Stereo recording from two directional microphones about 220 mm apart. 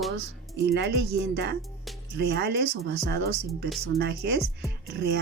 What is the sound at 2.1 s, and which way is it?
Speech, 50° right (ahead or behind).